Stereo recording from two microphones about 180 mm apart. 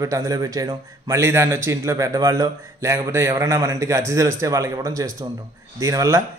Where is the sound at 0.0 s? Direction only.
20° right (ahead or behind).